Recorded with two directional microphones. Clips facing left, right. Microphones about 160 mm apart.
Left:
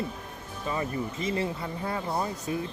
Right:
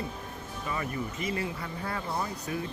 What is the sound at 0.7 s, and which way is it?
Speech, 25° left (ahead or behind).